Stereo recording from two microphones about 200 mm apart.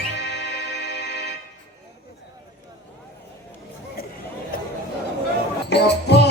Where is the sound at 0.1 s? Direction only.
55° left (ahead or behind).